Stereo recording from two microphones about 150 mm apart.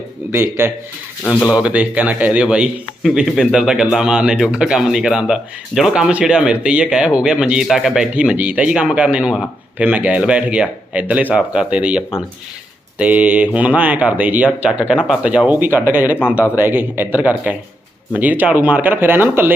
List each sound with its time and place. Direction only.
0.3 s a man's voice: 15° right (ahead or behind)
16.1 s speech: 15° left (ahead or behind)
16.6 s a man's voice: 15° right (ahead or behind)